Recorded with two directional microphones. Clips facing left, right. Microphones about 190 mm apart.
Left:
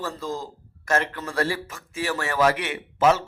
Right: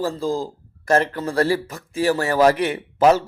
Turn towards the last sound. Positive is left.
turn(degrees=-35)  # may be behind; listen again after turning